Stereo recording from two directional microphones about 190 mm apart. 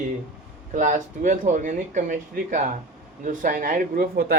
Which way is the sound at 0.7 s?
40° right (ahead or behind).